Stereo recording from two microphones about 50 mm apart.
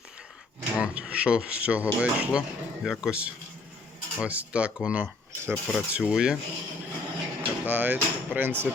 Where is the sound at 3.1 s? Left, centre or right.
Right.